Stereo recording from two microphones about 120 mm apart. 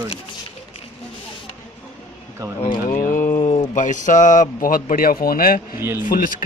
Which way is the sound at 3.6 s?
90° left.